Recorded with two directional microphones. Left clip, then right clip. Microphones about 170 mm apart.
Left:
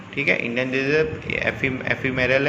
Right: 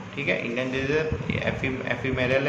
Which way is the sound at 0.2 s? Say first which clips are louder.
Left 5 dB; 30° left (ahead or behind).